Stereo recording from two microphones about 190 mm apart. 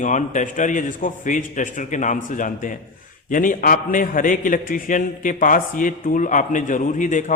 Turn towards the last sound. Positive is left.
turn(degrees=40)  # may be behind; listen again after turning